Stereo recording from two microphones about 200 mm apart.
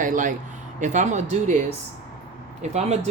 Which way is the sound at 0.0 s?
40° right (ahead or behind).